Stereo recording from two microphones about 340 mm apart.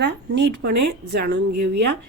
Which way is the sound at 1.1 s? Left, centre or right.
Right.